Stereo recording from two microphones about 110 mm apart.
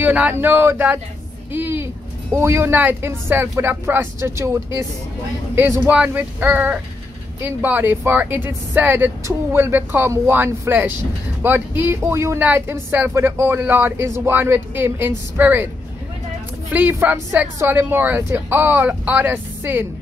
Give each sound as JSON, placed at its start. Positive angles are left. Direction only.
{"t": 0.0, "sound": "a woman's voice", "side_deg": -15}
{"t": 1.5, "sound": "a sound", "side_deg": -20}
{"t": 2.3, "sound": "speech", "side_deg": -25}
{"t": 5.6, "sound": "a woman's voice", "side_deg": -15}
{"t": 16.7, "sound": "a woman's voice", "side_deg": -15}